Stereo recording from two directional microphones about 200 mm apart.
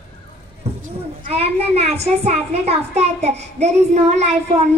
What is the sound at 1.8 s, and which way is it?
A child's voice, 30° right (ahead or behind).